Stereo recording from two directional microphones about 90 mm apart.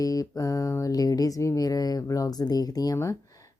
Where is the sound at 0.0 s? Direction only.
40° left (ahead or behind).